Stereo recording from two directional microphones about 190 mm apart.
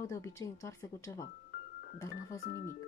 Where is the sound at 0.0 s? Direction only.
15° left (ahead or behind).